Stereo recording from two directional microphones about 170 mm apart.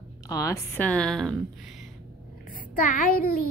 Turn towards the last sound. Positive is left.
turn(degrees=55)  # may be behind; listen again after turning